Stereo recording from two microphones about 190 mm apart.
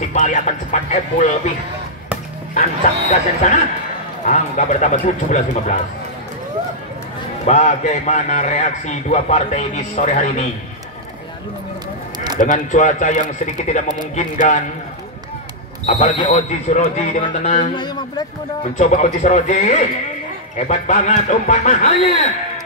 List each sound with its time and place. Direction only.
0.1 s a man's voice: 40° left (ahead or behind)
3.1 s a man's voice: 40° left (ahead or behind)
7.4 s a man's voice: 40° left (ahead or behind)
12.4 s a man's voice: 40° left (ahead or behind)
16.3 s a man's voice: 40° left (ahead or behind)
17.6 s speech: 25° left (ahead or behind)
18.6 s a man's voice: 40° left (ahead or behind)